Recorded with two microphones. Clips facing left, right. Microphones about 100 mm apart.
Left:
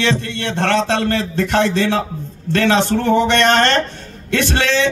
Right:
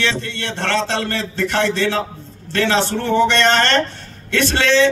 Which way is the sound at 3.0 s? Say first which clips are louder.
Right 1 dB; 15° left (ahead or behind).